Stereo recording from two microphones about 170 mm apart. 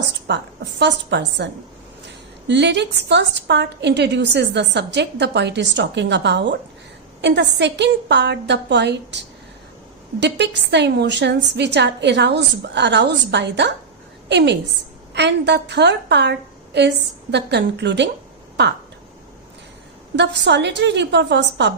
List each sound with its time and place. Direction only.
0.3 s a woman's voice: 90° right
2.5 s a woman's voice: 90° right
10.2 s a woman's voice: 90° right
20.1 s a woman's voice: 90° right